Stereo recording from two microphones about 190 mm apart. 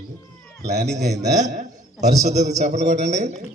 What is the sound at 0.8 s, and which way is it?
A man's voice, 35° right (ahead or behind).